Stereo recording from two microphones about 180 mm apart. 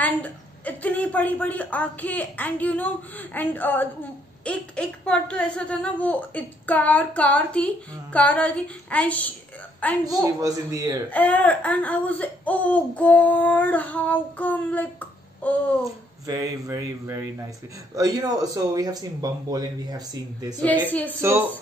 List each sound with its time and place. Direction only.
0.0 s speech: 10° left (ahead or behind)
10.2 s speech: 20° right (ahead or behind)
11.1 s speech: 10° left (ahead or behind)
15.8 s speech: 20° right (ahead or behind)
21.2 s a woman's voice: 15° right (ahead or behind)